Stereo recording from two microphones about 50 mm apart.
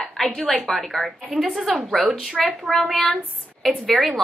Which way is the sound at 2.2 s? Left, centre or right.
Centre.